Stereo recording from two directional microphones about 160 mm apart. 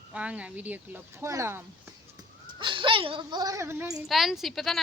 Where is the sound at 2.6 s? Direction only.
30° right (ahead or behind).